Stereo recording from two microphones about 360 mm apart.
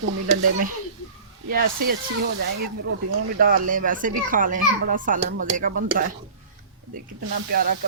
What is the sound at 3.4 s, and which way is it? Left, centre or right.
Speech, right.